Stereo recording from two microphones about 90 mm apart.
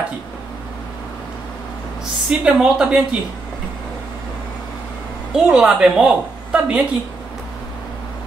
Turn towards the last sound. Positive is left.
turn(degrees=-10)  # may be behind; listen again after turning